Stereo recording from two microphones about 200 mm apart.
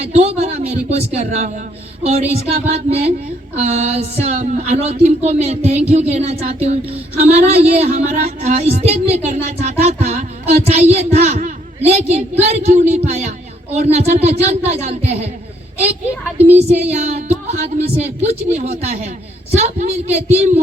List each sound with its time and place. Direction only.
0.1 s speech: 35° right (ahead or behind)
16.6 s speech: 35° right (ahead or behind)